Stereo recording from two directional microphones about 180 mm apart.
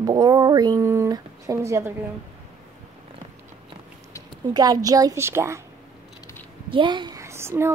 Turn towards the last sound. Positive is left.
turn(degrees=-15)  # may be behind; listen again after turning